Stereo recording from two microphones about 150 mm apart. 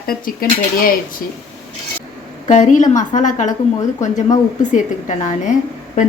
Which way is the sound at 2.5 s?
55° left (ahead or behind).